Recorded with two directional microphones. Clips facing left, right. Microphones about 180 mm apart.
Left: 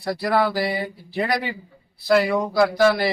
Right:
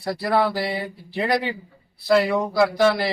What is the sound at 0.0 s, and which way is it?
A man's voice, centre (ahead or behind).